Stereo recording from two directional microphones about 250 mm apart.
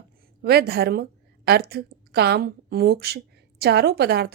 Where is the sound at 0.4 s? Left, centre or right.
Right.